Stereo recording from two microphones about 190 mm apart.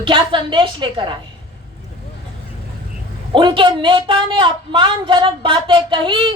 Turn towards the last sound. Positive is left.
turn(degrees=-25)  # may be behind; listen again after turning